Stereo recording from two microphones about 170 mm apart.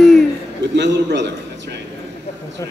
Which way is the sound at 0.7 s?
90° right.